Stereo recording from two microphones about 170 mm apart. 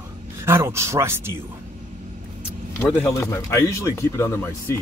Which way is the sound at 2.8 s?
15° left (ahead or behind).